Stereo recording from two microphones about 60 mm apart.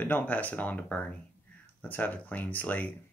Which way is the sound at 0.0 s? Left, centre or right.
Left.